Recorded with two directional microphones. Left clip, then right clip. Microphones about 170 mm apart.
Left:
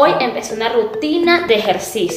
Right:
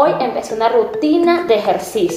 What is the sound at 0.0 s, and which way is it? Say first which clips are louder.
Speech: left 1 dB; 10° left (ahead or behind).